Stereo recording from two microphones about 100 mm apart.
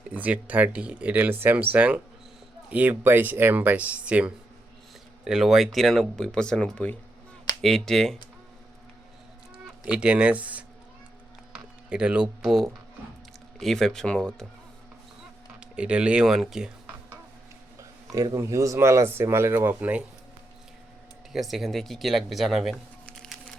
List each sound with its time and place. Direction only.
0.1 s speech: 15° right (ahead or behind); by 8.2 s 5° left (ahead or behind)
9.6 s speech: 10° right (ahead or behind)
11.9 s speech: 10° right (ahead or behind); by 14.4 s 5° left (ahead or behind)
15.6 s speech: 10° right (ahead or behind)
17.7 s speech: 35° right (ahead or behind)
21.3 s speech: centre (ahead or behind)